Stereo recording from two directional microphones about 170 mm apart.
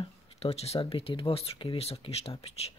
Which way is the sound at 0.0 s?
35° left (ahead or behind).